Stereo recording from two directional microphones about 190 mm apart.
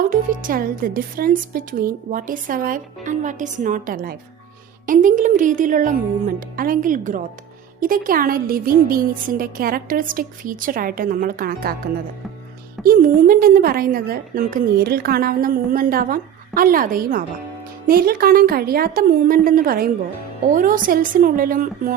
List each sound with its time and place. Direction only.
0.0 s a woman's voice: 45° right (ahead or behind)
12.8 s a woman's voice: 45° right (ahead or behind)